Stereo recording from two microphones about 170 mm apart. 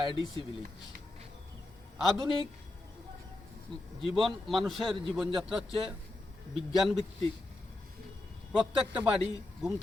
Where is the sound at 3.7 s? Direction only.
30° right (ahead or behind).